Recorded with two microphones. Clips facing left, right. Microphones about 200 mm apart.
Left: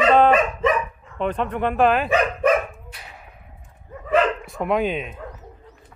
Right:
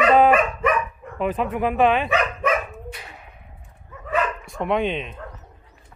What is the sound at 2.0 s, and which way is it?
Dog, 35° left (ahead or behind).